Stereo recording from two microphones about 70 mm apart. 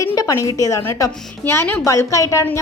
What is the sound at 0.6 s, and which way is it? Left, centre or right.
A woman's voice, left.